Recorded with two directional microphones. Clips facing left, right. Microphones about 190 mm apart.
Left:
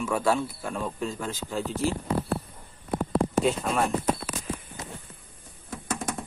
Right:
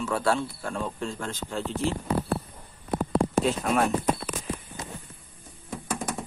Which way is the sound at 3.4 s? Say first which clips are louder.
Right 1 dB; centre (ahead or behind).